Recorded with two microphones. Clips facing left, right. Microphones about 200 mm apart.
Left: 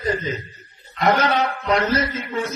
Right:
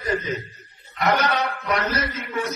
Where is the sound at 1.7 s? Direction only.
25° left (ahead or behind).